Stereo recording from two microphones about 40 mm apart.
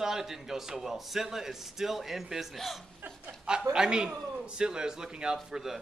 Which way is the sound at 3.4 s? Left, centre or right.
Centre.